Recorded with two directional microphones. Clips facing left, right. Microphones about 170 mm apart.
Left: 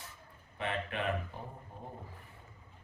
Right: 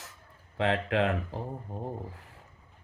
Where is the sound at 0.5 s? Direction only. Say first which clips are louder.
Right 9 dB; 90° right.